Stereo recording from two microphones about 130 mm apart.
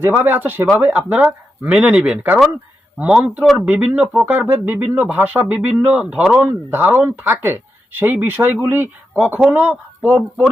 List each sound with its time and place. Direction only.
0.0 s speech: 15° right (ahead or behind)